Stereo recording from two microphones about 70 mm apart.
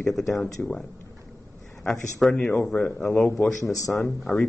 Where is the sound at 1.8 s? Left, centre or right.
Centre.